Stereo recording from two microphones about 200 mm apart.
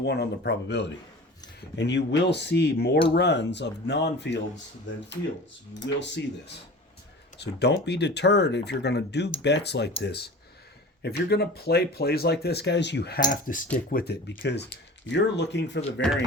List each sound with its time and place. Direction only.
0.0 s speech: 55° left (ahead or behind)
5.8 s speech: 60° left (ahead or behind)
7.3 s speech: 55° left (ahead or behind)
13.3 s speech: 40° left (ahead or behind); by 16.1 s 60° left (ahead or behind)